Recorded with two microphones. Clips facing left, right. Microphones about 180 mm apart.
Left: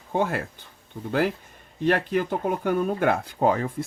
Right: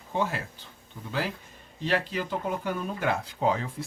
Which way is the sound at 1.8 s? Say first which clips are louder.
Left 6 dB; 55° left (ahead or behind).